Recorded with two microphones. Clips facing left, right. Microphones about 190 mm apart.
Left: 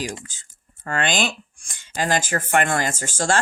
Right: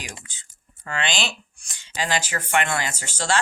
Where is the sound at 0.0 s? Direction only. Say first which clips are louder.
Left 10 dB; 40° left (ahead or behind).